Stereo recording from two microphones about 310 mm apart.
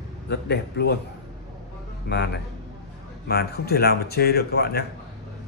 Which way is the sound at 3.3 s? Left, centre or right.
Left.